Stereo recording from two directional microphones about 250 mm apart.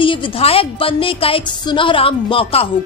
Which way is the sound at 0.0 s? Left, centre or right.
Left.